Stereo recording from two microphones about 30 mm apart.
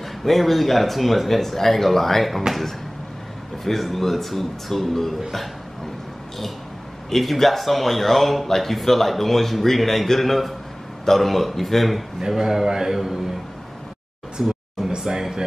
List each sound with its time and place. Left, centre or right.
0.2 s speech: centre
3.6 s speech: centre
7.1 s speech: centre
12.4 s a man's voice: centre
14.4 s a man's voice: centre